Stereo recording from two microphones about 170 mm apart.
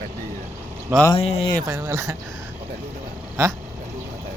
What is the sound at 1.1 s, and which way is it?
Speech, 35° left (ahead or behind).